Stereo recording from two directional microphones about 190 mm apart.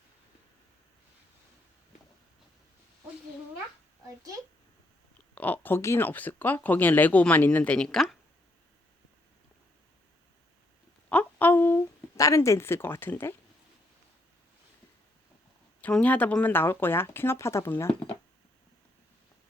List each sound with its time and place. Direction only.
4.0 s a child's voice: 15° right (ahead or behind)
5.3 s speech: 10° left (ahead or behind)
11.1 s a sound: 10° left (ahead or behind)
15.8 s speech: 5° left (ahead or behind)